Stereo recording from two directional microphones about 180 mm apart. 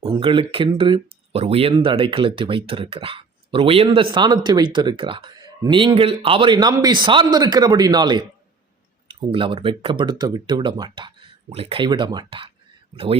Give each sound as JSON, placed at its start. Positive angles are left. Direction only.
{"t": 0.2, "sound": "speech", "side_deg": -30}